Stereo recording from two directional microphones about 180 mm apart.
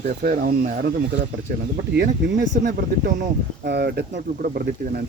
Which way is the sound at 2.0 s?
75° right (ahead or behind).